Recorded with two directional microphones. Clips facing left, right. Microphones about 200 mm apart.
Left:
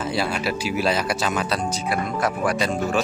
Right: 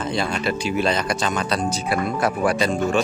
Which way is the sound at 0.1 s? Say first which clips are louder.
Right 2 dB; 5° left (ahead or behind).